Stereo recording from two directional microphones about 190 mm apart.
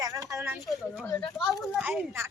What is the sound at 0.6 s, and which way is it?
Speech, centre (ahead or behind).